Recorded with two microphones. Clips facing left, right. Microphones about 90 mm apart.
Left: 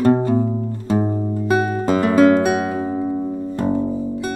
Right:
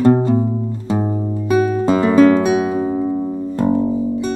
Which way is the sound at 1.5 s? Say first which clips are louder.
Right 4 dB; 40° left (ahead or behind).